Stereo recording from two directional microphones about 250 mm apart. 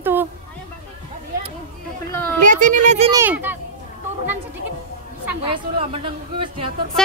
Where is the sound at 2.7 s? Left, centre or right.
Right.